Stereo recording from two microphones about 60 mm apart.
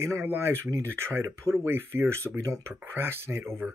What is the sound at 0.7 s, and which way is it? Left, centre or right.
Speech, right.